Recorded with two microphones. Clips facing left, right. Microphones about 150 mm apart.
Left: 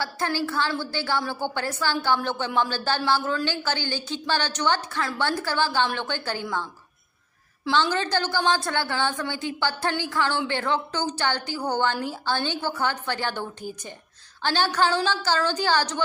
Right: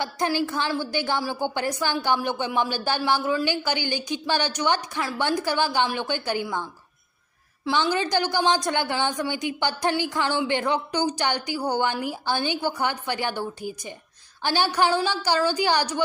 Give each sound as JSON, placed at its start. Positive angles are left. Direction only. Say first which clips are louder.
{"t": 0.0, "sound": "speech", "louder": "right 2 dB", "side_deg": -20}
{"t": 7.7, "sound": "speech", "louder": "even", "side_deg": -10}